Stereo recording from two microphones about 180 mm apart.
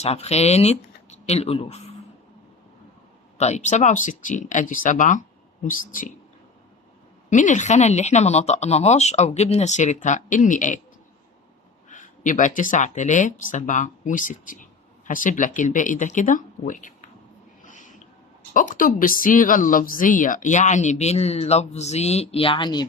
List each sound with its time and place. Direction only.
0.0 s speech: 35° left (ahead or behind)
3.3 s speech: 40° left (ahead or behind)
7.3 s speech: 45° left (ahead or behind)
11.9 s speech: 45° left (ahead or behind)
17.6 s a sound: 45° left (ahead or behind)
18.5 s speech: 50° left (ahead or behind); by 22.9 s 25° left (ahead or behind)